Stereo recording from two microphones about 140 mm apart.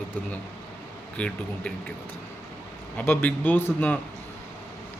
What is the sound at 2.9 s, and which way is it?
A man's voice, 15° left (ahead or behind).